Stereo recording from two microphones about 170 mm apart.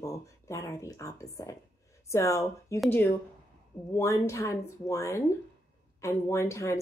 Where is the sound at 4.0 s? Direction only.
15° left (ahead or behind).